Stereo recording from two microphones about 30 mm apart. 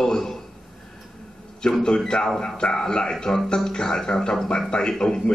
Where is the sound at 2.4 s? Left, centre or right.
Left.